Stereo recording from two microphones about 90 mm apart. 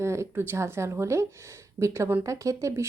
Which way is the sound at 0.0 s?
30° right (ahead or behind).